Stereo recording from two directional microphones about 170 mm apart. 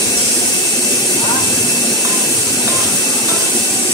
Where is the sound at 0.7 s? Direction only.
20° left (ahead or behind).